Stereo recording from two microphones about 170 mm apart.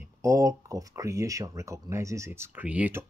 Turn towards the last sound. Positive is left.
turn(degrees=-10)  # may be behind; listen again after turning